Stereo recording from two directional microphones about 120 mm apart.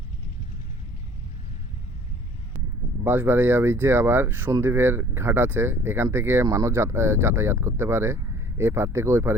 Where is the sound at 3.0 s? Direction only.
15° right (ahead or behind).